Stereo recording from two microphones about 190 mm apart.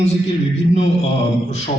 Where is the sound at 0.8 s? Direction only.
35° left (ahead or behind).